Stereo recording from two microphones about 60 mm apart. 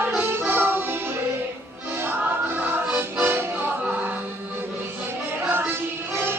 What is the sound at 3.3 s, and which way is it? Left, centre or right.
Music, right.